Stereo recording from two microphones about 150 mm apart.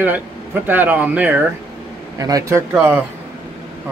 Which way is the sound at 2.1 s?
25° right (ahead or behind).